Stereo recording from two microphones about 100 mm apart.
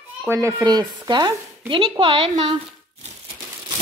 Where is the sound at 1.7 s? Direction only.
65° right (ahead or behind).